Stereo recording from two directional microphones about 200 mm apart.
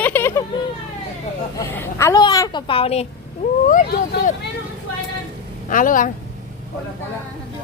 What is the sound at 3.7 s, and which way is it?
Speech, 45° left (ahead or behind).